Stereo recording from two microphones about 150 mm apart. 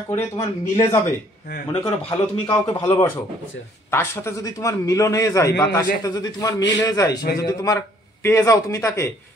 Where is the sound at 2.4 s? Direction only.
25° left (ahead or behind).